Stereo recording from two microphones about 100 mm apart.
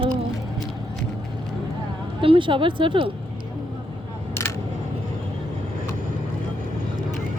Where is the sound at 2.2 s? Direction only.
60° right (ahead or behind).